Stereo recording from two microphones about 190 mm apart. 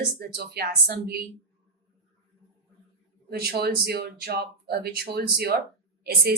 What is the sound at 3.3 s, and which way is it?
A woman's voice, 55° right (ahead or behind).